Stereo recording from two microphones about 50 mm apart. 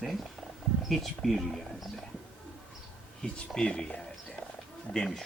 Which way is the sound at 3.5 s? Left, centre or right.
Centre.